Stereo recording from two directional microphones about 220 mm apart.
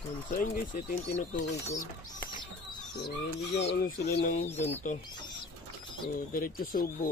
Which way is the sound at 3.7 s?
45° left (ahead or behind).